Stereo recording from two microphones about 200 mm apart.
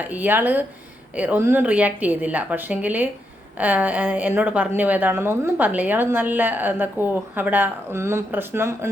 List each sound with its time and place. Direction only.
0.0 s a woman's voice: 10° right (ahead or behind)